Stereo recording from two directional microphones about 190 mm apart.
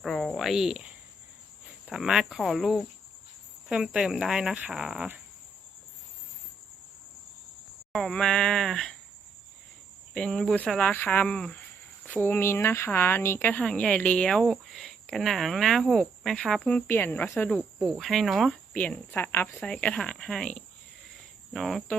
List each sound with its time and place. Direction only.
0.0 s speech: centre (ahead or behind)
7.9 s speech: 5° left (ahead or behind)
10.2 s speech: 5° left (ahead or behind)